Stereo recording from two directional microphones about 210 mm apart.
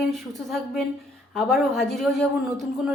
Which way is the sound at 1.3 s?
Centre (ahead or behind).